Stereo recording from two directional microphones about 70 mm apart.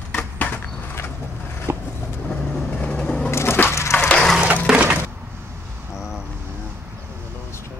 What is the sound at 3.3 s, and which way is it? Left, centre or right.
Wood, left.